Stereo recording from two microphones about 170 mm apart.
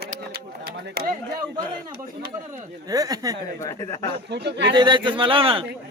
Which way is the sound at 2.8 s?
20° right (ahead or behind).